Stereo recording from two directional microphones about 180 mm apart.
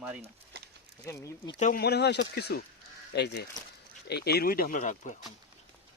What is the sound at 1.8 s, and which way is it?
Speech, 65° left (ahead or behind).